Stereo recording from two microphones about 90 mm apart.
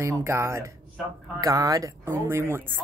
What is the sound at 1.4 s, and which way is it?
Speech, 40° right (ahead or behind).